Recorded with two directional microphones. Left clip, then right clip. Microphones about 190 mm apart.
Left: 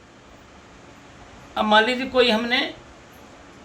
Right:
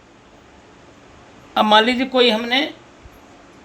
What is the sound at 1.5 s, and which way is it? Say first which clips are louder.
Speech: right 4 dB; 40° right (ahead or behind).